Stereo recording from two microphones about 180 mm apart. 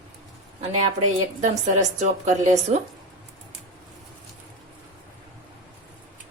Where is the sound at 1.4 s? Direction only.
40° right (ahead or behind).